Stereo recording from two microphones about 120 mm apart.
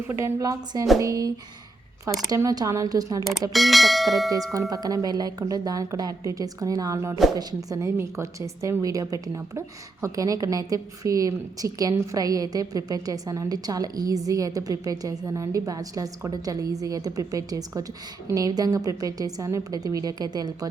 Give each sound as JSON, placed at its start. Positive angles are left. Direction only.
{"t": 0.1, "sound": "a woman's voice", "side_deg": -25}
{"t": 3.5, "sound": "speech", "side_deg": 0}
{"t": 4.7, "sound": "a woman's voice", "side_deg": -30}